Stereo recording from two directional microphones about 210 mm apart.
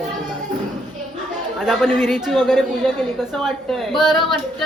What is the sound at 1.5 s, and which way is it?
A woman's voice, centre (ahead or behind).